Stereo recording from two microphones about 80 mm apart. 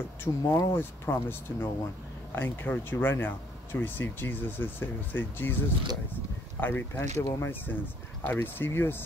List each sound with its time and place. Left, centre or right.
0.2 s speech: left
6.6 s speech: left